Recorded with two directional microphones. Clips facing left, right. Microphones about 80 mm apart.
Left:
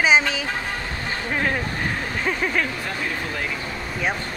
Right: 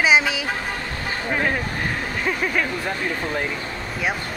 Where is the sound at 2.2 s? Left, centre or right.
Centre.